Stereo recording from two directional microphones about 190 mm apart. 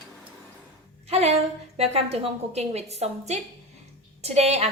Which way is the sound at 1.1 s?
35° right (ahead or behind).